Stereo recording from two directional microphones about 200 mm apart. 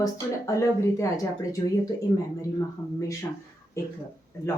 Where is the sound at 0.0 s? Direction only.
15° left (ahead or behind).